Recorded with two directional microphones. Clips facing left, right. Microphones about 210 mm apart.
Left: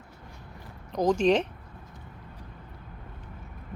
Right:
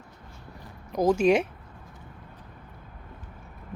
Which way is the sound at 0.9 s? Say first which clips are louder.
Right 2 dB; 10° right (ahead or behind).